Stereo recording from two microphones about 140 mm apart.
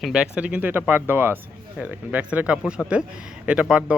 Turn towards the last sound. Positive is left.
turn(degrees=-5)  # may be behind; listen again after turning